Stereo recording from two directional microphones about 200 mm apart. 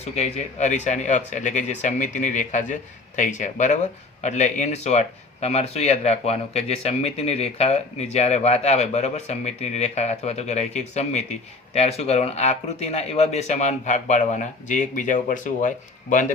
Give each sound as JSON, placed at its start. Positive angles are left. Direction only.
{"t": 0.0, "sound": "speech", "side_deg": 35}